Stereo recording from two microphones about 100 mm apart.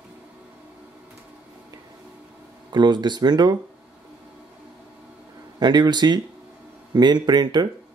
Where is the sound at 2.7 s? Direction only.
45° right (ahead or behind).